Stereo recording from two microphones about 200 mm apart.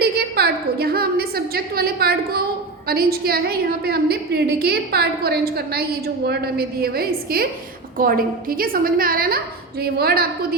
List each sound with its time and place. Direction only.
0.0 s a woman's voice: 50° right (ahead or behind)